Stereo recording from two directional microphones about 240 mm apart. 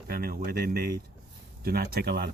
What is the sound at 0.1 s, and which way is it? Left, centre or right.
Speech, right.